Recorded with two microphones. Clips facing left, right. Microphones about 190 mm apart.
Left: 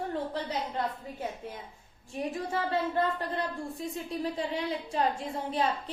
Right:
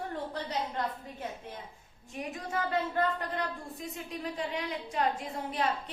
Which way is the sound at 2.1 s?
30° left (ahead or behind).